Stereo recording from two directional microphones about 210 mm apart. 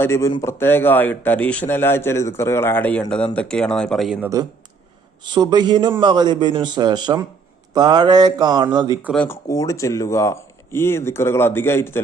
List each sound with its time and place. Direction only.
0.0 s a man's voice: 15° left (ahead or behind)
5.2 s speech: 20° right (ahead or behind)
9.1 s a man's voice: 10° left (ahead or behind)